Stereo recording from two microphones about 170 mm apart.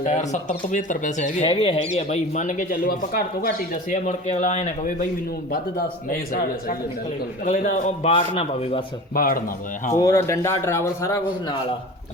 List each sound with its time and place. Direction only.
0.0 s speech: 45° left (ahead or behind)
1.5 s speech: 35° left (ahead or behind)
5.5 s speech: 60° left (ahead or behind)
8.1 s a man's voice: 30° left (ahead or behind)
9.1 s speech: 60° left (ahead or behind)
9.9 s a man's voice: 20° left (ahead or behind)